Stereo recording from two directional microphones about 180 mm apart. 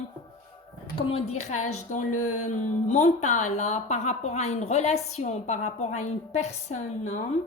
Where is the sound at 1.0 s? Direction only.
35° left (ahead or behind).